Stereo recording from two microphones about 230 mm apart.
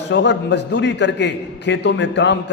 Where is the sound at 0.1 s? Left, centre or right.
Left.